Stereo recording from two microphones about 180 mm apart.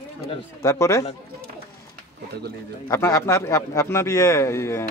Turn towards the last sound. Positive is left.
turn(degrees=15)  # may be behind; listen again after turning